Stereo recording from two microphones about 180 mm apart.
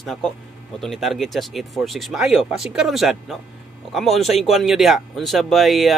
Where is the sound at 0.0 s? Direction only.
Centre (ahead or behind).